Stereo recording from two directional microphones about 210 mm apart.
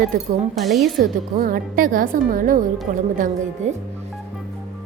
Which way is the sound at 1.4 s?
40° right (ahead or behind).